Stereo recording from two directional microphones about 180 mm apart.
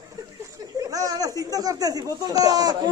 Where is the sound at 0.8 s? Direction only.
20° right (ahead or behind).